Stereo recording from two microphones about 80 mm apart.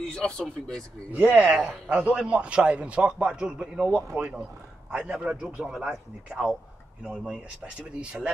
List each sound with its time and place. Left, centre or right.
0.0 s speech: centre
1.1 s a man's voice: centre